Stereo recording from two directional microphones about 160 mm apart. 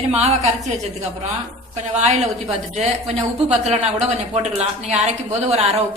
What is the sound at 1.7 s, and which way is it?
Speech, 45° right (ahead or behind).